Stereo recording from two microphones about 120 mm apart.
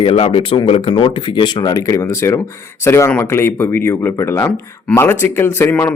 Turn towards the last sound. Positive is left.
turn(degrees=15)  # may be behind; listen again after turning